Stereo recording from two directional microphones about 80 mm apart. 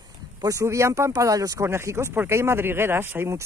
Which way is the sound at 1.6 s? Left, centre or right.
Right.